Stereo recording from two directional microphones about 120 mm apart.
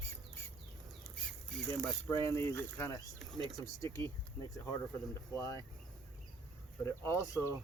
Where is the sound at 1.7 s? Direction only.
20° left (ahead or behind).